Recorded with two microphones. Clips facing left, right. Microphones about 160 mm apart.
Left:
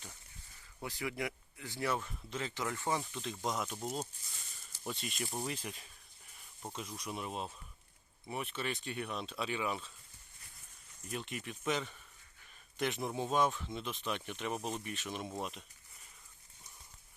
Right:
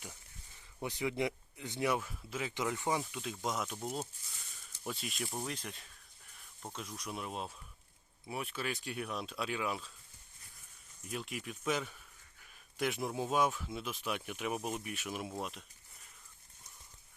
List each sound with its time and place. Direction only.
0.8 s speech: 20° right (ahead or behind)
2.0 s speech: 5° right (ahead or behind)
2.6 s speech: 15° right (ahead or behind)
3.0 s speech: 5° right (ahead or behind)
11.1 s speech: centre (ahead or behind)